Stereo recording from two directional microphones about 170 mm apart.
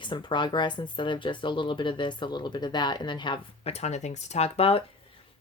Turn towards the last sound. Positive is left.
turn(degrees=35)  # may be behind; listen again after turning